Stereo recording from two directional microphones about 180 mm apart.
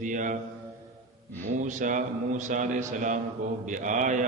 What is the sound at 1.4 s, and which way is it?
A man's voice, 45° right (ahead or behind).